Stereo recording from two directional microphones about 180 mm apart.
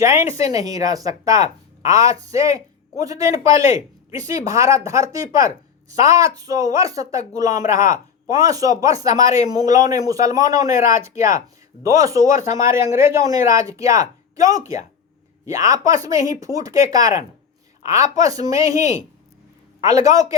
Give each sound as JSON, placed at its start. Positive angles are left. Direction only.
{"t": 0.0, "sound": "a woman's voice", "side_deg": -15}